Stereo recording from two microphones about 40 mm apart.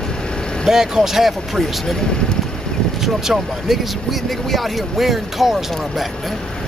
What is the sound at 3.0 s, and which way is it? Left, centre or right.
Speech, centre.